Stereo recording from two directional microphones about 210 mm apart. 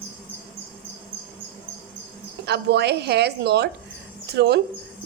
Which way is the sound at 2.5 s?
50° right (ahead or behind).